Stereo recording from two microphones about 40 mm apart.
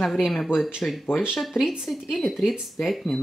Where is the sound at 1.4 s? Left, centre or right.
Centre.